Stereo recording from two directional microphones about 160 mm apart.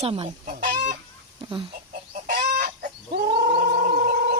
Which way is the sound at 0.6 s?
55° right (ahead or behind).